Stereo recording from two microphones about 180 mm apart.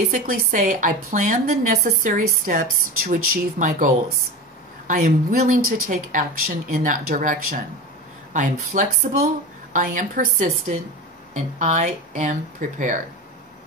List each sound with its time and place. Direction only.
0.1 s a woman's voice: 45° right (ahead or behind)
9.0 s speech: 60° right (ahead or behind)
9.7 s a woman's voice: 45° right (ahead or behind)